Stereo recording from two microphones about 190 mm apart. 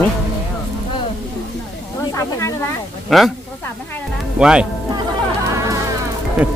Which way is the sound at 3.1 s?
Centre (ahead or behind).